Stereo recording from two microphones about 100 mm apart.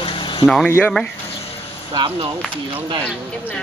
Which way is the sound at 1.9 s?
55° right (ahead or behind).